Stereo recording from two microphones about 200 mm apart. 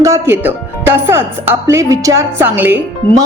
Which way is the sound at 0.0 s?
15° right (ahead or behind).